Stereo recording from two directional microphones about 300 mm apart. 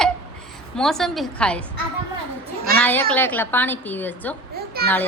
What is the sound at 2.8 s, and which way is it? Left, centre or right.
A woman's voice, centre.